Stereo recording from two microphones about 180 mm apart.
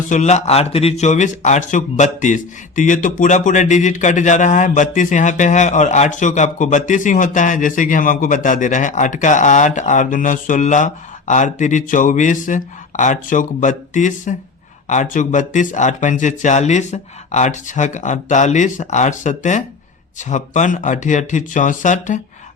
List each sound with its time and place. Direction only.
0.1 s speech: 40° left (ahead or behind)